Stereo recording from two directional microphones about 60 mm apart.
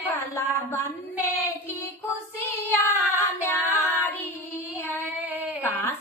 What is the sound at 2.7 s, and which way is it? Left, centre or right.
Child singing, left.